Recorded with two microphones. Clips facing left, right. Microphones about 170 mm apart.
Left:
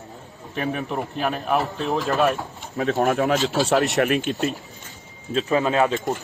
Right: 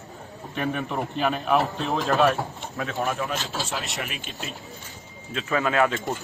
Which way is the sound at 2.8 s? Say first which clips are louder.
Left 7 dB; 40° left (ahead or behind).